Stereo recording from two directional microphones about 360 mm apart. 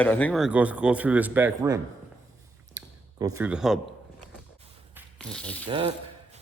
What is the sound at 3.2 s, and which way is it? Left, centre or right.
Speech, centre.